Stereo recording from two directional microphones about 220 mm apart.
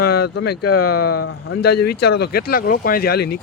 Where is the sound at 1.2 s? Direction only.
55° left (ahead or behind).